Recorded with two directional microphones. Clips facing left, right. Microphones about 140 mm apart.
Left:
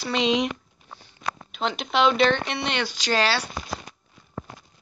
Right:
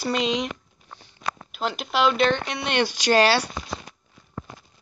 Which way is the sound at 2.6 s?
50° right (ahead or behind).